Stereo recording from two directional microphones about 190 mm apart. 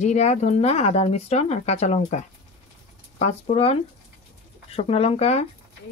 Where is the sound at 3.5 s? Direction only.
30° left (ahead or behind).